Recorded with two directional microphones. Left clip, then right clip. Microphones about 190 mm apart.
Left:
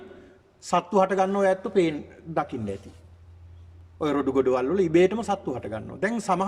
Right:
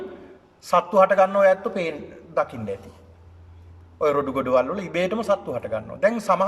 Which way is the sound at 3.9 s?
40° left (ahead or behind).